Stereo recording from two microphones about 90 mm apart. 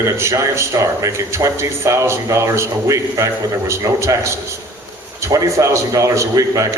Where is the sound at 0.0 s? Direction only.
30° right (ahead or behind).